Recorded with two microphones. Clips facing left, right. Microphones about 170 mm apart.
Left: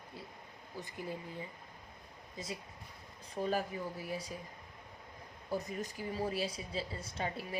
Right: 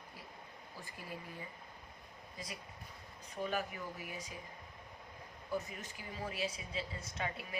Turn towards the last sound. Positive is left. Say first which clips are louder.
# left 3 dB
turn(degrees=30)  # may be behind; listen again after turning